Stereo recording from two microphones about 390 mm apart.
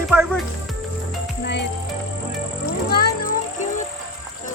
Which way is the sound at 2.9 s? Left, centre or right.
Left.